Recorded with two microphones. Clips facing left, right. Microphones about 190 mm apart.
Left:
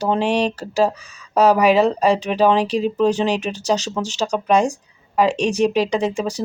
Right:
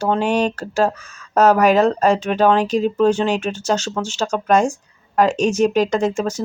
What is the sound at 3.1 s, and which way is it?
Speech, 35° left (ahead or behind).